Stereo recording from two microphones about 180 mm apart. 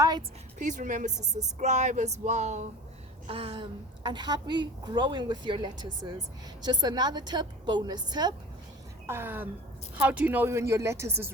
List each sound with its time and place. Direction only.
0.2 s a woman's voice: 45° right (ahead or behind)
3.2 s a woman's voice: 30° right (ahead or behind)
9.0 s speech: 10° right (ahead or behind)